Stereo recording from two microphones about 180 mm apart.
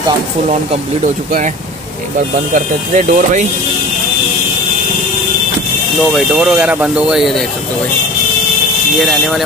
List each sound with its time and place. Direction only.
1.0 s speech: 45° right (ahead or behind)
2.5 s speech: 45° right (ahead or behind)
6.1 s speech: centre (ahead or behind)
9.0 s speech: centre (ahead or behind)